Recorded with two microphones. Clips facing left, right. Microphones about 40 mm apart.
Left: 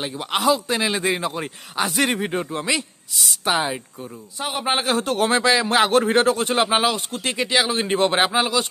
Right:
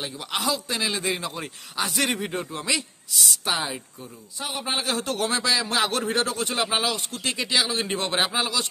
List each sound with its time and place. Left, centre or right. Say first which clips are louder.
0.0 s speech: left 7 dB; left